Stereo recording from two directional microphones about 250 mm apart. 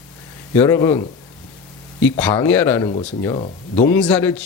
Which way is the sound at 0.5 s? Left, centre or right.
Centre.